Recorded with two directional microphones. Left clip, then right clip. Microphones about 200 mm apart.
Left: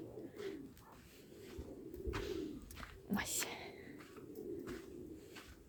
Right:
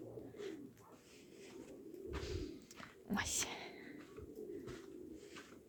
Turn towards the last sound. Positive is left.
turn(degrees=5)  # may be behind; listen again after turning